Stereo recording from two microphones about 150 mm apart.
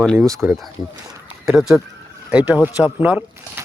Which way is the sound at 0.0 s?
5° left (ahead or behind).